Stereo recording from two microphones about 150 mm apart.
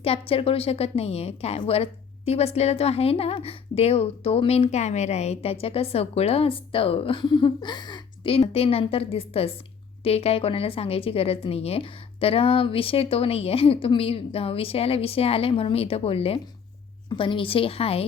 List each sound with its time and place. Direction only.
0.0 s a woman's voice: 40° left (ahead or behind)